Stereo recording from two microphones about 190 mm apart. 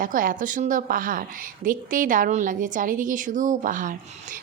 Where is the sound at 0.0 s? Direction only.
45° right (ahead or behind).